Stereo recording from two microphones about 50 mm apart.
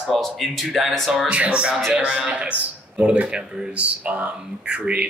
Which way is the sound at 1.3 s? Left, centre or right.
Right.